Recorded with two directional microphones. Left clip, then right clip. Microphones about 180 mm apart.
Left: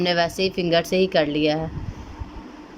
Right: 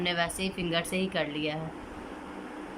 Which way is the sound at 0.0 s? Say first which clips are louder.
Left 9 dB; 45° left (ahead or behind).